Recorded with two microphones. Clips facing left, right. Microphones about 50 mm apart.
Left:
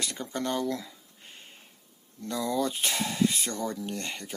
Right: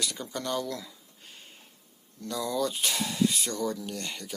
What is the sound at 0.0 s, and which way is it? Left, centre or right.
Speech, left.